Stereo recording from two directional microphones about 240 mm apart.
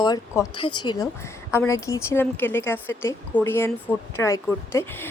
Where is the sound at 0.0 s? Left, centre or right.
Centre.